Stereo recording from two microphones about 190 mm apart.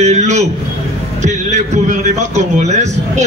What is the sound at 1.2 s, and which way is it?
A man's voice, 40° right (ahead or behind).